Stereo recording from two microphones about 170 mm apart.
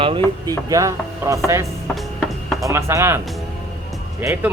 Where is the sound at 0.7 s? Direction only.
20° right (ahead or behind).